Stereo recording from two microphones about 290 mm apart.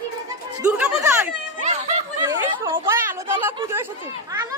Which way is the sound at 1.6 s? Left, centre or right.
Right.